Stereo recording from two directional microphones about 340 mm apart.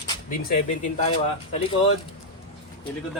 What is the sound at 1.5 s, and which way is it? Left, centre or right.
Speech, centre.